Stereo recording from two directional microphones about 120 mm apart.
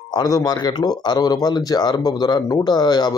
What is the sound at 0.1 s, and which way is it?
Speech, 35° left (ahead or behind).